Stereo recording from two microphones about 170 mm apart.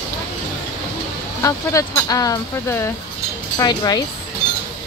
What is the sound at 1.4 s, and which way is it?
Speech, 20° left (ahead or behind).